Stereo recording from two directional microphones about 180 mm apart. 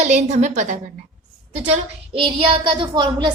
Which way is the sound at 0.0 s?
40° right (ahead or behind).